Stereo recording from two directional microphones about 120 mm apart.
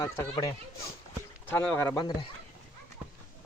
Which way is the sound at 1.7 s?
20° left (ahead or behind).